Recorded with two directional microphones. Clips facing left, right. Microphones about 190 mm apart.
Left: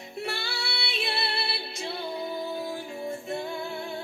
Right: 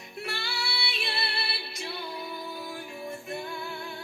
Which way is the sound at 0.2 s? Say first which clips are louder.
Left 3 dB; 30° left (ahead or behind).